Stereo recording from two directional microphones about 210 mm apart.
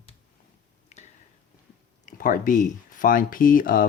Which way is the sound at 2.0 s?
40° left (ahead or behind).